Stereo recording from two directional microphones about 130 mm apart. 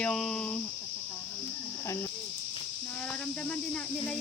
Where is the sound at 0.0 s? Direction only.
5° left (ahead or behind).